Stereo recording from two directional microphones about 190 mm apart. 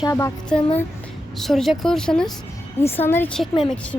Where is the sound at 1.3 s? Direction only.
Centre (ahead or behind).